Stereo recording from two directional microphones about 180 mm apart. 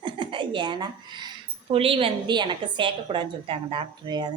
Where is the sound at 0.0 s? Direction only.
25° right (ahead or behind).